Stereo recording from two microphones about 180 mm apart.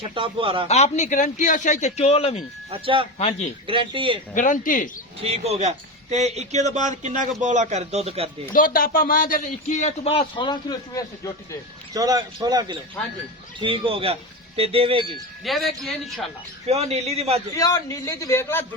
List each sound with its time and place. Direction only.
0.0 s a man's voice: 30° right (ahead or behind)
0.7 s speech: 40° left (ahead or behind)
2.6 s a man's voice: 30° right (ahead or behind)
4.4 s speech: 45° left (ahead or behind)
5.2 s a man's voice: 35° right (ahead or behind)
8.5 s speech: 50° left (ahead or behind); by 11.0 s 25° left (ahead or behind)
11.9 s a man's voice: 20° right (ahead or behind)
15.4 s speech: centre (ahead or behind)
16.6 s a man's voice: 35° right (ahead or behind)
17.6 s a man's voice: 20° left (ahead or behind)